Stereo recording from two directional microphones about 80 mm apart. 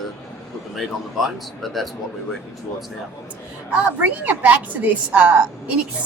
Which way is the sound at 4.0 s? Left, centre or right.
Right.